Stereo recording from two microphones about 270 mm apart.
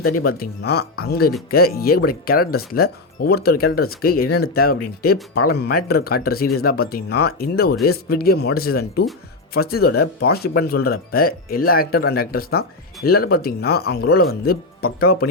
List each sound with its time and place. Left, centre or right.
0.3 s speech: left